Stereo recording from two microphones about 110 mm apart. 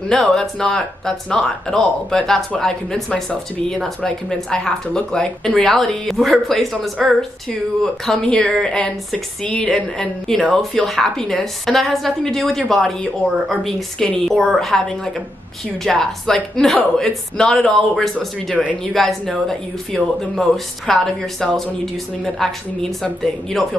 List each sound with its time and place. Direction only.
0.1 s speech: 5° left (ahead or behind)
15.8 s speech: 5° left (ahead or behind)